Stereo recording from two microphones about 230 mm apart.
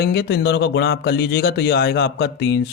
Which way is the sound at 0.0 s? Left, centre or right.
Left.